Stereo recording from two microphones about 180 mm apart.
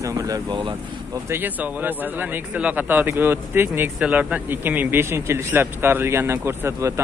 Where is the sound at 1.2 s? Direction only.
10° right (ahead or behind).